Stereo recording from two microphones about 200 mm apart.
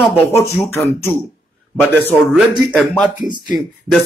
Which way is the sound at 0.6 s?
15° left (ahead or behind).